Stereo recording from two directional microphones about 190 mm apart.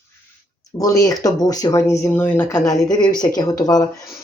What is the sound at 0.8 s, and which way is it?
Speech, 15° left (ahead or behind).